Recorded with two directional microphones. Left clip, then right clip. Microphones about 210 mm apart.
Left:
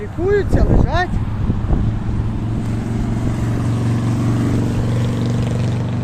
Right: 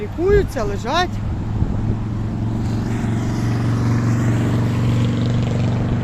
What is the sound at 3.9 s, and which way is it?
Vehicle, 40° left (ahead or behind).